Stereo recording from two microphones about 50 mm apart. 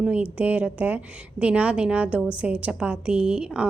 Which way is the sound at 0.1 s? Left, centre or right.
Right.